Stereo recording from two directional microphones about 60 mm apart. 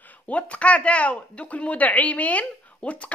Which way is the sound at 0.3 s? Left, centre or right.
Left.